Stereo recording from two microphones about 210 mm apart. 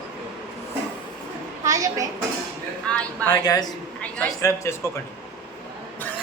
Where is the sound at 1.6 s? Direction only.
15° right (ahead or behind).